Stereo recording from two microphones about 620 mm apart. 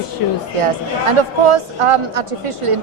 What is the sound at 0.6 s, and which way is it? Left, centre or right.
A woman's voice, right.